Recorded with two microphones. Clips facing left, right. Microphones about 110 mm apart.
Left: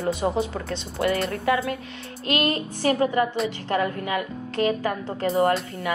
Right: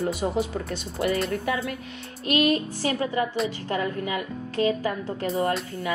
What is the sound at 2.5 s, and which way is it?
A woman's voice, 45° left (ahead or behind).